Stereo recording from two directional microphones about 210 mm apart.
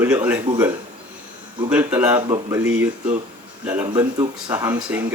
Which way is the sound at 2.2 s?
20° right (ahead or behind).